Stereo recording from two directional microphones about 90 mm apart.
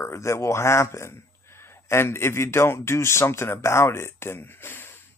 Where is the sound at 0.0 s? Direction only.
30° left (ahead or behind).